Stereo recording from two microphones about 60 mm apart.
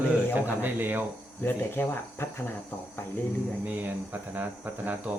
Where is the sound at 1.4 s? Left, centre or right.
Left.